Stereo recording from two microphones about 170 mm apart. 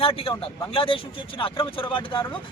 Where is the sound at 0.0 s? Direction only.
35° left (ahead or behind).